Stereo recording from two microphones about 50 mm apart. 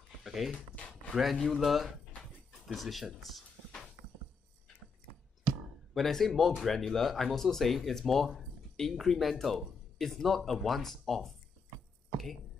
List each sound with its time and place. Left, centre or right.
0.2 s dog: centre
0.6 s a sound: left
1.1 s speech: centre
5.9 s speech: centre